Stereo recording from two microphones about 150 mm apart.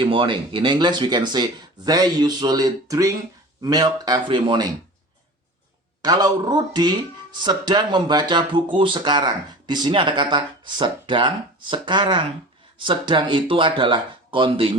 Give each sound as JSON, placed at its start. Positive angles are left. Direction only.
{"t": 0.0, "sound": "speech", "side_deg": -35}
{"t": 6.0, "sound": "speech", "side_deg": -25}